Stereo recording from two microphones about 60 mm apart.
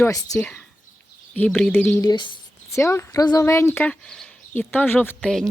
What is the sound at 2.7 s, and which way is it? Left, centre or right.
Speech, left.